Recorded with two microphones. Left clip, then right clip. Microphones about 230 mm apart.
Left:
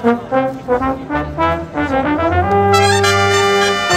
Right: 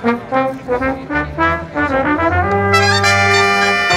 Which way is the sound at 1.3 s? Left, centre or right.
Left.